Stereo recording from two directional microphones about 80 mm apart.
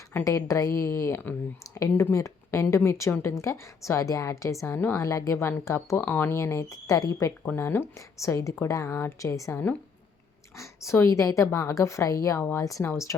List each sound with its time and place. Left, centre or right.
0.3 s a woman's voice: left
4.9 s a woman's voice: left
6.0 s a woman's voice: left
7.4 s a woman's voice: left
9.1 s a woman's voice: left
10.6 s a woman's voice: left
12.4 s a woman's voice: left